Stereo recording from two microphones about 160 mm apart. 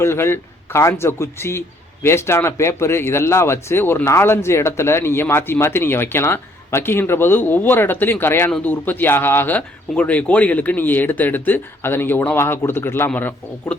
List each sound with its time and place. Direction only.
0.0 s speech: 15° left (ahead or behind)